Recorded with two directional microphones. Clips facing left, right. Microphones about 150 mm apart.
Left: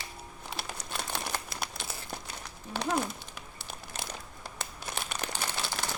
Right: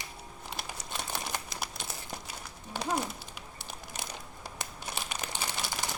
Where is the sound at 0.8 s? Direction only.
10° right (ahead or behind).